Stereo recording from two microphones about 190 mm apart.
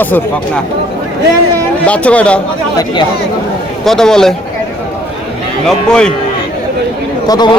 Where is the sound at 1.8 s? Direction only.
5° left (ahead or behind).